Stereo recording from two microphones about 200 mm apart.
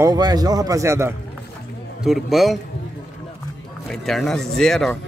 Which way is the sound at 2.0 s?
Centre (ahead or behind).